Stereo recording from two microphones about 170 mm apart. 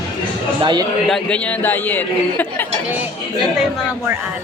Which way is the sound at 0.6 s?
25° right (ahead or behind).